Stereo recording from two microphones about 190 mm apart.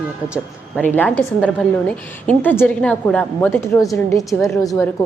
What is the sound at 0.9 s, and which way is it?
A woman's voice, 5° left (ahead or behind).